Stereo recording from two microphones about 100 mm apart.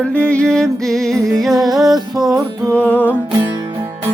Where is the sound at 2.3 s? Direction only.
35° right (ahead or behind).